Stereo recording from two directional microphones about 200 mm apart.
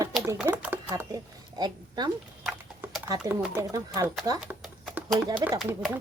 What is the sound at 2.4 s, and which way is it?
Horse, 5° right (ahead or behind).